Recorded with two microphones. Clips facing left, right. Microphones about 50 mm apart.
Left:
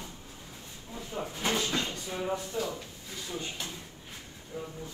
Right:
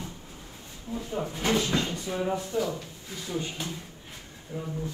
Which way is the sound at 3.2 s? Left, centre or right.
Right.